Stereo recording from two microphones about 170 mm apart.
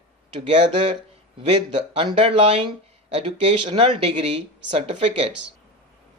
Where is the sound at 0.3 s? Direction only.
30° right (ahead or behind).